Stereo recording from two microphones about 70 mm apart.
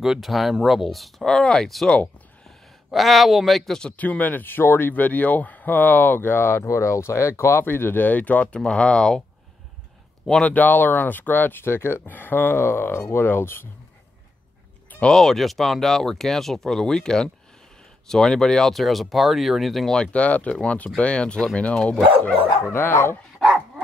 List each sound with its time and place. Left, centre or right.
0.0 s speech: centre
1.2 s speech: centre
2.9 s speech: centre
3.9 s speech: left
10.2 s speech: centre
10.5 s speech: left
14.9 s a sound: centre
15.1 s speech: centre
20.0 s speech: centre
22.7 s speech: left